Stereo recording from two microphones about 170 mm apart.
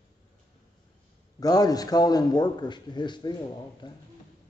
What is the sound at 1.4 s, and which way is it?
A man's voice, 20° left (ahead or behind).